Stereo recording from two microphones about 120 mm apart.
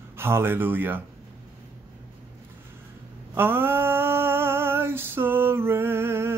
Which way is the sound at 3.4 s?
20° right (ahead or behind).